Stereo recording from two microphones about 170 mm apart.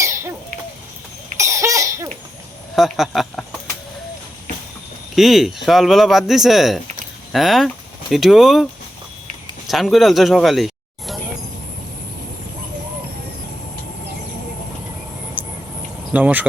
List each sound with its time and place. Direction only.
0.0 s a sound: 15° right (ahead or behind)
1.4 s cough: 15° right (ahead or behind)
2.7 s speech: centre (ahead or behind)
5.1 s speech: centre (ahead or behind)
9.6 s speech: centre (ahead or behind)
15.4 s a sound: 10° right (ahead or behind)
16.1 s speech: 10° right (ahead or behind)